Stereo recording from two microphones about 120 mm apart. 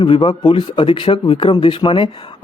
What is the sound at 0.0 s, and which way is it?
Speech, 45° left (ahead or behind).